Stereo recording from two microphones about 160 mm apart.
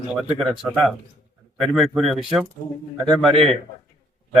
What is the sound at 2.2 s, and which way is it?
Speech, centre (ahead or behind).